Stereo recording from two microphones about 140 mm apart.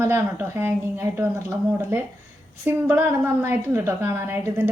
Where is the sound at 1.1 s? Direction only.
15° right (ahead or behind).